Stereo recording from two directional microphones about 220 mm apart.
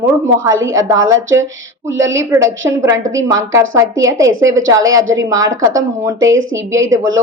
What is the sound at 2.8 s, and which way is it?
Speech, 15° right (ahead or behind).